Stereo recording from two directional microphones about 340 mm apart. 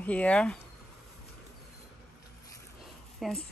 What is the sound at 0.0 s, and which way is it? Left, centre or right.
Speech, centre.